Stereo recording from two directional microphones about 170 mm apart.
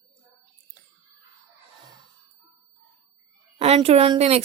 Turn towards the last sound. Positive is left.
turn(degrees=-35)  # may be behind; listen again after turning